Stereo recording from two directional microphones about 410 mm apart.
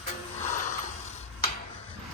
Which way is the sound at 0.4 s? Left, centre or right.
Centre.